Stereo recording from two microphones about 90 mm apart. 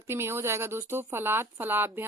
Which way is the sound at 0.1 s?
30° right (ahead or behind).